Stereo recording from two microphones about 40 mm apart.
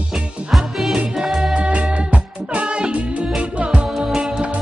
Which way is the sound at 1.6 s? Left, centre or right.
Right.